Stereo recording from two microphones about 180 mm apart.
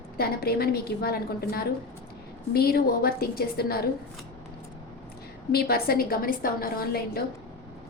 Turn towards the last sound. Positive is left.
turn(degrees=55)  # may be behind; listen again after turning